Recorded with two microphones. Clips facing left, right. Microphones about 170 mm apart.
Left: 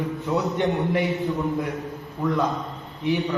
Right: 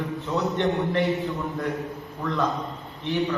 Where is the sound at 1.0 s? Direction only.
Centre (ahead or behind).